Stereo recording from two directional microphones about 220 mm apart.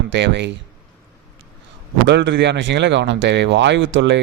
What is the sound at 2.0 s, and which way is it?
A man's voice, 55° right (ahead or behind).